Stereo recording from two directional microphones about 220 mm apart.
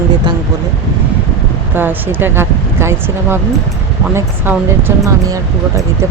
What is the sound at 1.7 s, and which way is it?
Speech, 10° right (ahead or behind).